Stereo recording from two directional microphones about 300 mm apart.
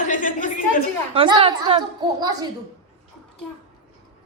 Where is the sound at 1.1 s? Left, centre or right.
Centre.